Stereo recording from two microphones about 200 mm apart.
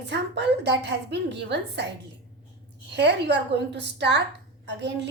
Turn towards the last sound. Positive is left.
turn(degrees=-60)  # may be behind; listen again after turning